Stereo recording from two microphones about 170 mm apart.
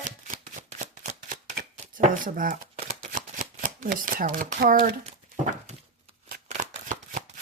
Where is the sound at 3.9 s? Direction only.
55° right (ahead or behind).